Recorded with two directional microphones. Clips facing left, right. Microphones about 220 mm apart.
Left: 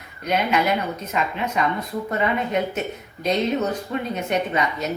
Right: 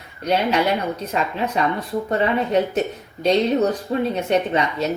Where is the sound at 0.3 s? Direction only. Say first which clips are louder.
Right 2 dB; 30° right (ahead or behind).